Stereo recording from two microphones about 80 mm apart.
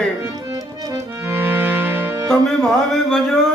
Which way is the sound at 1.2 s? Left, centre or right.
Right.